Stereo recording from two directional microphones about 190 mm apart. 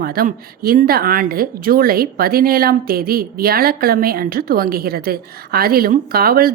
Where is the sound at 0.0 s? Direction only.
50° right (ahead or behind).